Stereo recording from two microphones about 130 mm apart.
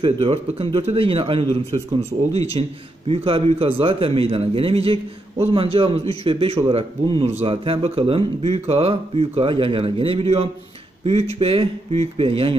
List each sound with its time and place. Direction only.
0.0 s a man's voice: 45° right (ahead or behind)